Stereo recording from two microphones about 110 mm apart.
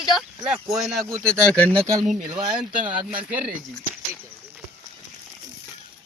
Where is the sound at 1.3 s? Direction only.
10° left (ahead or behind).